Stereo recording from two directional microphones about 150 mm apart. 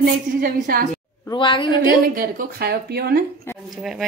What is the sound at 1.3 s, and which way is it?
Speech, 35° left (ahead or behind).